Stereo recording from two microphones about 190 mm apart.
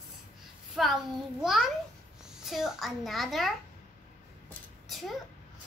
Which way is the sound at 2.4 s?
Centre (ahead or behind).